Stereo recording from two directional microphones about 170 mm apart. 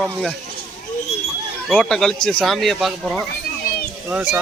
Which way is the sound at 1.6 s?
Centre (ahead or behind).